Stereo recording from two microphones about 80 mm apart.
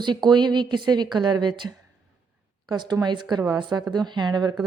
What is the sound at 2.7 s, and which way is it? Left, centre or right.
A woman's voice, right.